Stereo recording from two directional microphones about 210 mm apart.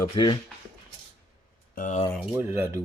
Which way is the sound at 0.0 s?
20° left (ahead or behind).